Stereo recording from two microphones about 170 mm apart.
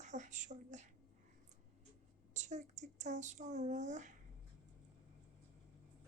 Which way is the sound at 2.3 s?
45° right (ahead or behind).